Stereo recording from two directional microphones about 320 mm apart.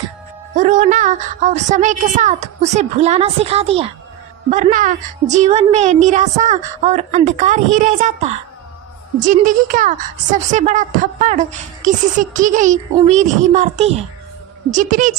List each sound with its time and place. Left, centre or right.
0.6 s a woman's voice: right